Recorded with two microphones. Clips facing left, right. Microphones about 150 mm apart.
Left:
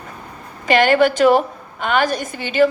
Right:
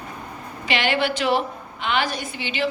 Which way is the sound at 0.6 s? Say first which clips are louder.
Left 9 dB; 45° left (ahead or behind).